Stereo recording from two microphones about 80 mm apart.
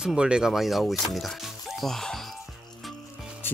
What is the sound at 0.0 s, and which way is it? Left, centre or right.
Speech, centre.